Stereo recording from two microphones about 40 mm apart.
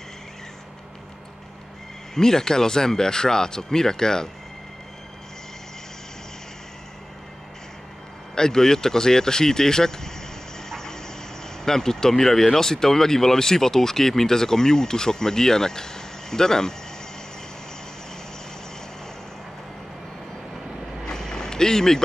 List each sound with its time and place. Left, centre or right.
2.1 s speech: centre
8.4 s speech: centre
10.7 s vehicle: centre
11.6 s speech: centre
21.0 s vehicle: centre